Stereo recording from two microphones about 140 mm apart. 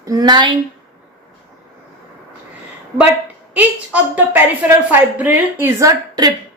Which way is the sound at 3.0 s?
10° right (ahead or behind).